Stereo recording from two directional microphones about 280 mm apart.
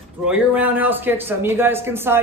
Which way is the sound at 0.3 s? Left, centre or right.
Centre.